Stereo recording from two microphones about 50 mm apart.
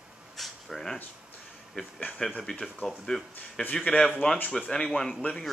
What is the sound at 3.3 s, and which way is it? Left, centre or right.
Speech, left.